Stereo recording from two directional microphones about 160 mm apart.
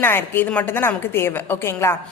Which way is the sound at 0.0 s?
15° left (ahead or behind).